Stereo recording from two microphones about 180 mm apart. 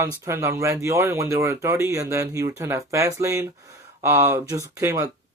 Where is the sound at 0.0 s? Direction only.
15° right (ahead or behind).